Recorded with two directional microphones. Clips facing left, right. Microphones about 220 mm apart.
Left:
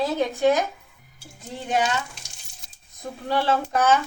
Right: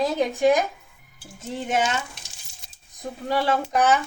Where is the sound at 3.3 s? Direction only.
10° right (ahead or behind).